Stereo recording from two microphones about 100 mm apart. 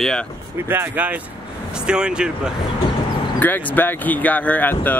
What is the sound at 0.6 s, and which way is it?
Speech, 20° right (ahead or behind).